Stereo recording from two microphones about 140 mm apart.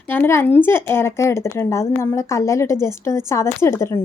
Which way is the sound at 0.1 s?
15° left (ahead or behind).